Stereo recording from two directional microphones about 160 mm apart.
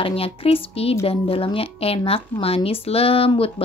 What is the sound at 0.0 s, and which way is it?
A woman's voice, 35° left (ahead or behind).